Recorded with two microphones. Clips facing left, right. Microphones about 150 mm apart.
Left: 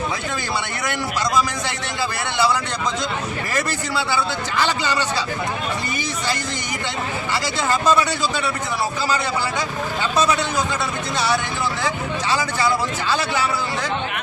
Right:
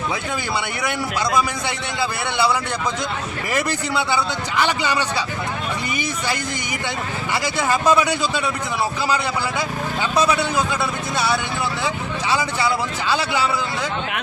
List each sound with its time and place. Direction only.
3.5 s a man's voice: 15° right (ahead or behind)
7.4 s a man's voice: 15° right (ahead or behind)
10.0 s a man's voice: 10° right (ahead or behind)
12.3 s a man's voice: 15° right (ahead or behind)